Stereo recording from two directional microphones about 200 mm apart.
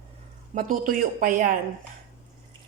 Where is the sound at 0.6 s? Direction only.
40° right (ahead or behind).